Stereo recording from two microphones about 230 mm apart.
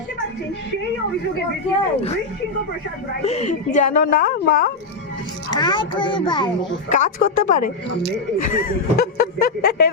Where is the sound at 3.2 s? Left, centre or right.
Left.